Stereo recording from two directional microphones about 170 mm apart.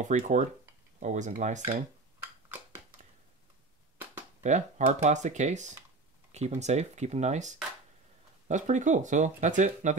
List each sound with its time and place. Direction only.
0.0 s speech: 45° right (ahead or behind)
4.4 s speech: 45° right (ahead or behind)